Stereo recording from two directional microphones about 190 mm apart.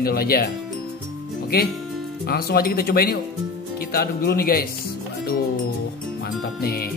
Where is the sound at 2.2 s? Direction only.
55° left (ahead or behind).